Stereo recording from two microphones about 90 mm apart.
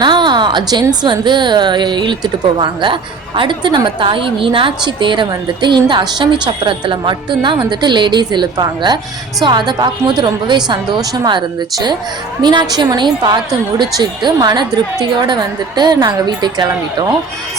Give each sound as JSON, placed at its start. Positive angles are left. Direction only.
{"t": 0.0, "sound": "a woman's voice", "side_deg": -60}